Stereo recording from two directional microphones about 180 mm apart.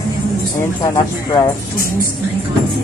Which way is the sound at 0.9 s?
20° left (ahead or behind).